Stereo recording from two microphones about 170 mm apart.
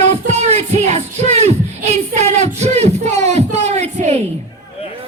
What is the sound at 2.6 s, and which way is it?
Speech, 40° right (ahead or behind).